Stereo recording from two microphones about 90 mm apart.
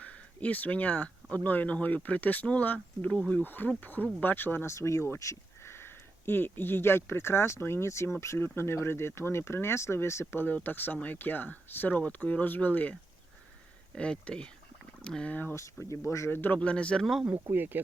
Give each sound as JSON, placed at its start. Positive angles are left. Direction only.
{"t": 0.0, "sound": "speech", "side_deg": 15}
{"t": 4.7, "sound": "speech", "side_deg": 30}
{"t": 15.5, "sound": "speech", "side_deg": 35}
{"t": 16.6, "sound": "speech", "side_deg": 10}
{"t": 17.5, "sound": "speech", "side_deg": -20}